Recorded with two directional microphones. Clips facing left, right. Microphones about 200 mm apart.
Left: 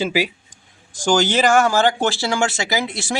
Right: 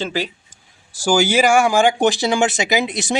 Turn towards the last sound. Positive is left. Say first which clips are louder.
# right 3 dB
turn(degrees=-20)  # may be behind; listen again after turning